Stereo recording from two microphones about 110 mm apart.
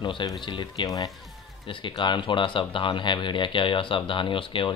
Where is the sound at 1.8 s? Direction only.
45° left (ahead or behind).